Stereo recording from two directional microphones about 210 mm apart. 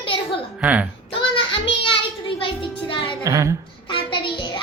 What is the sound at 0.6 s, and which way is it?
Speech, 5° right (ahead or behind).